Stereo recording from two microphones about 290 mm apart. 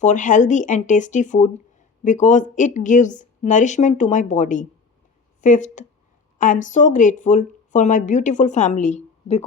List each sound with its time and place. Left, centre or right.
0.0 s speech: left